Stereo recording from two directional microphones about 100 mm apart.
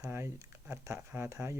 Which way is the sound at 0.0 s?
25° right (ahead or behind).